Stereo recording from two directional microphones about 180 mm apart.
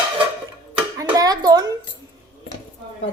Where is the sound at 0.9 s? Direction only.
20° right (ahead or behind).